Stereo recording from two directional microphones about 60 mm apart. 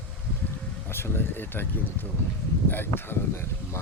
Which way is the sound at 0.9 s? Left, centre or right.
Left.